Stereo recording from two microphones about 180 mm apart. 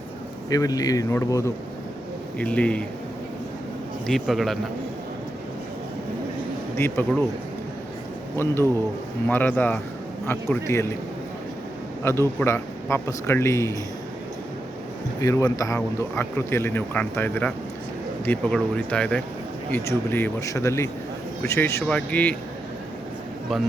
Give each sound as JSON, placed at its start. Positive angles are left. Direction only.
{"t": 0.5, "sound": "speech", "side_deg": 20}
{"t": 4.0, "sound": "a man's voice", "side_deg": 0}
{"t": 6.7, "sound": "speech", "side_deg": 15}
{"t": 8.4, "sound": "speech", "side_deg": 15}
{"t": 12.0, "sound": "speech", "side_deg": 15}
{"t": 15.2, "sound": "speech", "side_deg": 15}